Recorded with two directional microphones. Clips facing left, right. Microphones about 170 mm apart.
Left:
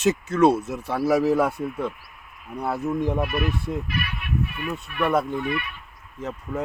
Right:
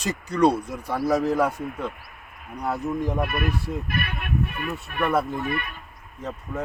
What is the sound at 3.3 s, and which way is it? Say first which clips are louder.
Speech: left 1 dB; 50° right (ahead or behind).